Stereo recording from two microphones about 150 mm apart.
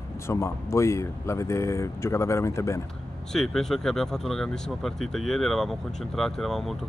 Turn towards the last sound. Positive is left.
turn(degrees=0)  # may be behind; listen again after turning